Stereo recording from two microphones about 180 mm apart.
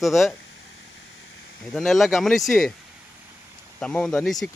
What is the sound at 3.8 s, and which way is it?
Speech, 5° left (ahead or behind).